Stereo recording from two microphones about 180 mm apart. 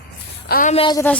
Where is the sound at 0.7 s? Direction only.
25° left (ahead or behind).